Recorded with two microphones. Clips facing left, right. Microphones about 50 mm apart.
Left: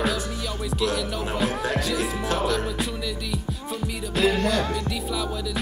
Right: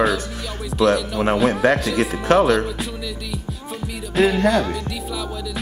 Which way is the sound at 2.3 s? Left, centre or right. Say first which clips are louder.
Right 13 dB; right.